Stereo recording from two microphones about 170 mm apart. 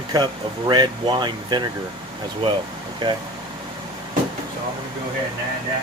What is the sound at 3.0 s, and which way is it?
Speech, 25° right (ahead or behind).